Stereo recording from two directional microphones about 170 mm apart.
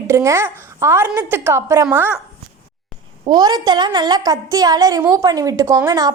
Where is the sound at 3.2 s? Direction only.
25° right (ahead or behind).